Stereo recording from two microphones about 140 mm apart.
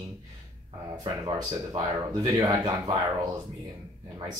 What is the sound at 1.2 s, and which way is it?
Speech, 30° right (ahead or behind).